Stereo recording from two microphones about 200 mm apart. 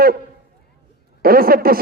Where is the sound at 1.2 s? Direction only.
50° right (ahead or behind).